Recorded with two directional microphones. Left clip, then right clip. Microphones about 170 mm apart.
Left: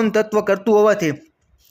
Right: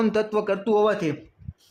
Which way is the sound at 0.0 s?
20° left (ahead or behind).